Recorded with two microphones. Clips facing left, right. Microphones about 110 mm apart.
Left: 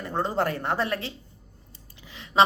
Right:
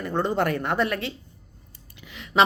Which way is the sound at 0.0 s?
30° left (ahead or behind).